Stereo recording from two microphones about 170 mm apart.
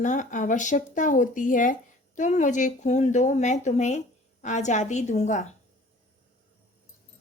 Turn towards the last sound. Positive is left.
turn(degrees=45)  # may be behind; listen again after turning